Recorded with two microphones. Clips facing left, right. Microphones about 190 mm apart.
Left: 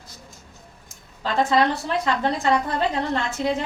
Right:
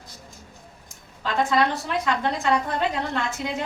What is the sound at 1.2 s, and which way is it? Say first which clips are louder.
A woman's voice: left 2 dB; 35° left (ahead or behind).